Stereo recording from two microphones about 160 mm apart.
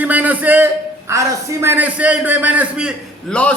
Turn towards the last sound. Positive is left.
turn(degrees=5)  # may be behind; listen again after turning